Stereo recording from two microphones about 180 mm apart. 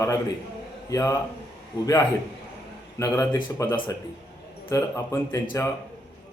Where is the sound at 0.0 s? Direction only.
20° left (ahead or behind).